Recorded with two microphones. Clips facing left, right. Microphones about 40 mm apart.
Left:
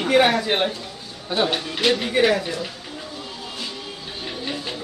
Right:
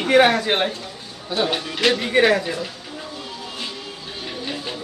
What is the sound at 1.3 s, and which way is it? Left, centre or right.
Speech, left.